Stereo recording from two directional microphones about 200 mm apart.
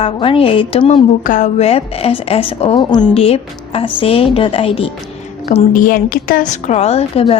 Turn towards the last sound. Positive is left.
turn(degrees=30)  # may be behind; listen again after turning